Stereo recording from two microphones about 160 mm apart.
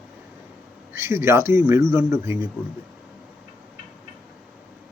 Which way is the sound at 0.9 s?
15° right (ahead or behind).